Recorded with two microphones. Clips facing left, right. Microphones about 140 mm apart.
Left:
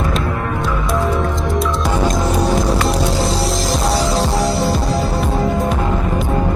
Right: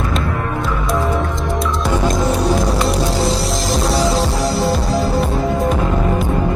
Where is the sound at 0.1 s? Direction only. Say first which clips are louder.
Even; centre (ahead or behind).